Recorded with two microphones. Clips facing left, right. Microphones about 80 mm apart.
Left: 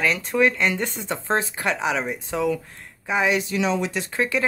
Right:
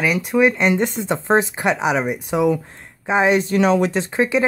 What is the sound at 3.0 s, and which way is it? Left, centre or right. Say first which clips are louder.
Speech: right 5 dB; right.